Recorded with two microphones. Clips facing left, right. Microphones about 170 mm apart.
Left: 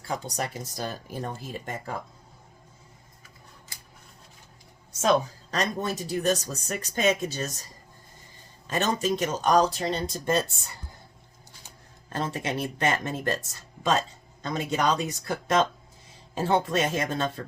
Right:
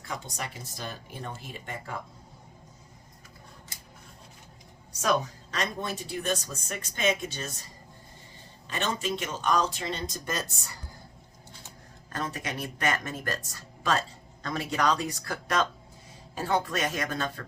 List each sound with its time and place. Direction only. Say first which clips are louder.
0.1 s speech: left 6 dB; 40° left (ahead or behind)
4.9 s a sound: left 4 dB; 25° left (ahead or behind)
5.5 s speech: left 4 dB; 40° left (ahead or behind)
8.6 s speech: left 5 dB; 40° left (ahead or behind)
12.1 s speech: left 4 dB; 30° left (ahead or behind)